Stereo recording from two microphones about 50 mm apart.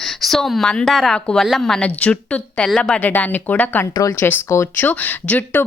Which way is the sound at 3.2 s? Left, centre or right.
Left.